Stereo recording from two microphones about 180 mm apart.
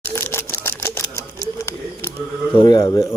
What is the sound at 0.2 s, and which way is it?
Camera, 15° left (ahead or behind).